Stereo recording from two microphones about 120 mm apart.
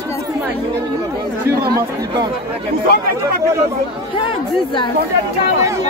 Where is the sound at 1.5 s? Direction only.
30° right (ahead or behind).